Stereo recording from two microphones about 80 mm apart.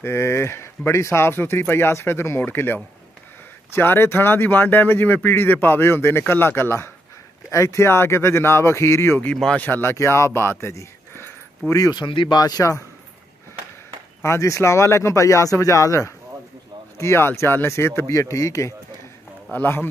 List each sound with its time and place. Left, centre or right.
0.0 s speech: left
9.4 s speech: centre
9.7 s speech: left
11.9 s speech: left
12.4 s speech: left
14.2 s speech: left
17.0 s speech: left
19.5 s speech: left